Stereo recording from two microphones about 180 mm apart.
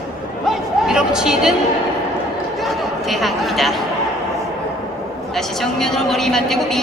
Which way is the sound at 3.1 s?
Centre (ahead or behind).